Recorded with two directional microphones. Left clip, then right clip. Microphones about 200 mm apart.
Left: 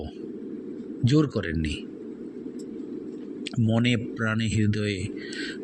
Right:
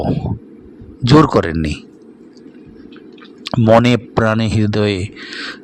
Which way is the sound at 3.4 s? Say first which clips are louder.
Right 16 dB; 40° right (ahead or behind).